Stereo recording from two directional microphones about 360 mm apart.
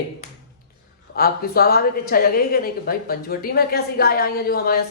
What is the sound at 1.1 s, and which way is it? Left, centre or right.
A woman's voice, left.